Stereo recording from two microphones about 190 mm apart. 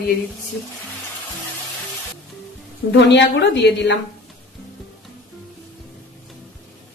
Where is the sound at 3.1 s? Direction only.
65° left (ahead or behind).